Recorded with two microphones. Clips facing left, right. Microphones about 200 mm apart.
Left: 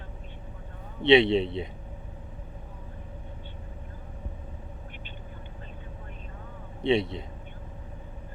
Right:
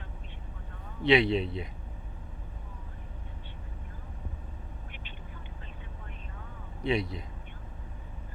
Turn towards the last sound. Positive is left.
turn(degrees=25)  # may be behind; listen again after turning